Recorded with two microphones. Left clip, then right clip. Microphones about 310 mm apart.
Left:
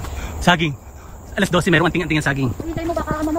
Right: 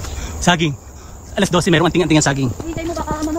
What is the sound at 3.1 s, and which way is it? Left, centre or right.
Music, centre.